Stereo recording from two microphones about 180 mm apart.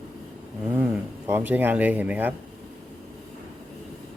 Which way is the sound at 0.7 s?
10° right (ahead or behind).